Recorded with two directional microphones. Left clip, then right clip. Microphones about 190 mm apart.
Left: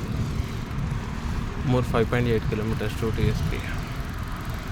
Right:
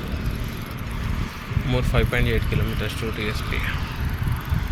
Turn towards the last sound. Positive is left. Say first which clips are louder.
# right 1 dB
turn(degrees=25)  # may be behind; listen again after turning